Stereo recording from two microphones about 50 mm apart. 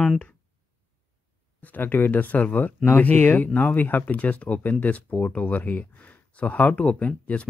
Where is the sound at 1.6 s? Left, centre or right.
Left.